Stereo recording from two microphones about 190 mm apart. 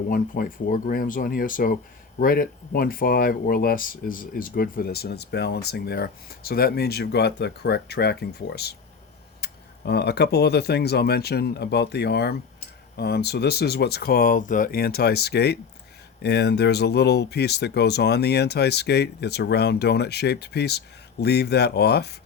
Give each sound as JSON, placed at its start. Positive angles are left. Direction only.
{"t": 0.1, "sound": "speech", "side_deg": 50}